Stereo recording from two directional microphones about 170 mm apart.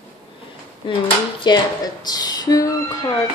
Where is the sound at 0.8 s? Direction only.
30° left (ahead or behind).